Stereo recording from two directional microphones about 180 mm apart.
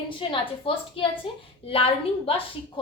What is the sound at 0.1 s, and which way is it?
A woman's voice, 30° left (ahead or behind).